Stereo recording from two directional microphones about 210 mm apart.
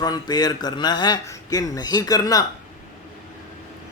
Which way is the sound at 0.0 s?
20° left (ahead or behind).